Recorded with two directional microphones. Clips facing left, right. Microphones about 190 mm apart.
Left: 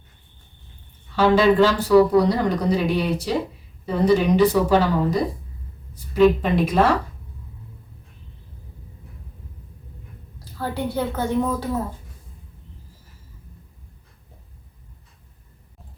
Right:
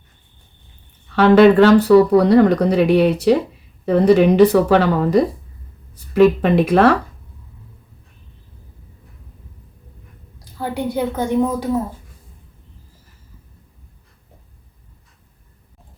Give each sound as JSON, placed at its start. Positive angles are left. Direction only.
{"t": 1.1, "sound": "speech", "side_deg": -65}
{"t": 10.6, "sound": "a woman's voice", "side_deg": -15}